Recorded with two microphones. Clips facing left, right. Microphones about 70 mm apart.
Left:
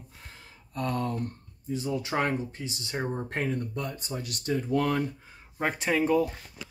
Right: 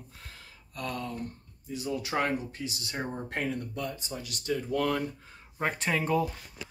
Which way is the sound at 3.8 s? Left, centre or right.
Left.